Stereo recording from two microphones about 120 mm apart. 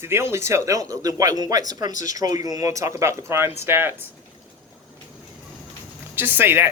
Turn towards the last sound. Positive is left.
turn(degrees=-20)  # may be behind; listen again after turning